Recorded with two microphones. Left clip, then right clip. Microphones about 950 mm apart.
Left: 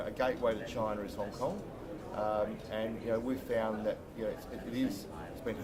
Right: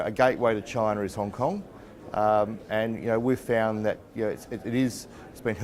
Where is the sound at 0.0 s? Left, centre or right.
Right.